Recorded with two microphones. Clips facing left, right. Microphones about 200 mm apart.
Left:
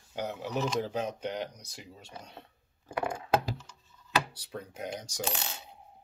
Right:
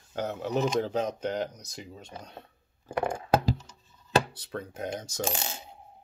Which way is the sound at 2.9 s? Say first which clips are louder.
Right 3 dB; 50° right (ahead or behind).